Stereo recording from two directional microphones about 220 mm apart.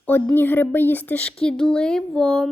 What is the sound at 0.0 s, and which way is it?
Speech, 10° left (ahead or behind).